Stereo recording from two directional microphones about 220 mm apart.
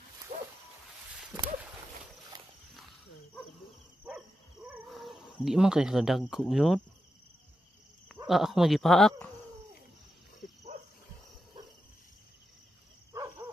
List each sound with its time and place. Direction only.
0.3 s a sound: 35° right (ahead or behind)
4.7 s speech: centre (ahead or behind)
8.3 s speech: centre (ahead or behind)
13.1 s dog: 15° right (ahead or behind)